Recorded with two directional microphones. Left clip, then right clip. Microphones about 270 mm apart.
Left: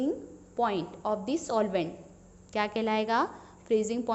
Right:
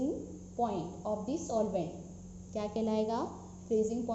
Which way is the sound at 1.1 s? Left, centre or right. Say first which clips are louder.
Left 6 dB; left.